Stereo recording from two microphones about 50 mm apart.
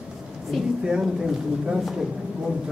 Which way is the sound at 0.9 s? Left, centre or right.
Centre.